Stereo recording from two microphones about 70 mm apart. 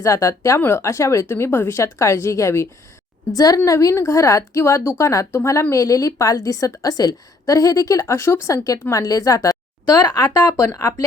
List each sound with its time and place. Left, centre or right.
0.0 s speech: left
3.3 s a woman's voice: left
4.9 s a woman's voice: left
5.7 s a woman's voice: left
8.0 s speech: left